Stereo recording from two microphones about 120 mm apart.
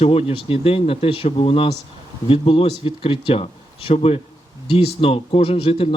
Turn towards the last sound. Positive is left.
turn(degrees=50)  # may be behind; listen again after turning